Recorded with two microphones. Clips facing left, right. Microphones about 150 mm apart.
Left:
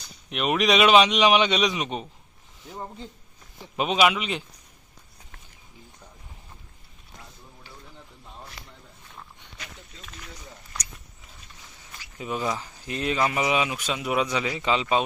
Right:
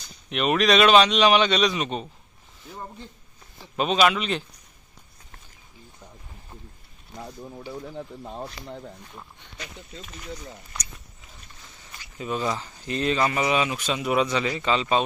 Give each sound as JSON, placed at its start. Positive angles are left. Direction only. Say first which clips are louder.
{"t": 0.3, "sound": "speech", "louder": "right 2 dB", "side_deg": 5}
{"t": 3.8, "sound": "speech", "louder": "right 1 dB", "side_deg": 10}
{"t": 7.7, "sound": "speech", "louder": "right 14 dB", "side_deg": -55}
{"t": 12.2, "sound": "speech", "louder": "right 1 dB", "side_deg": 10}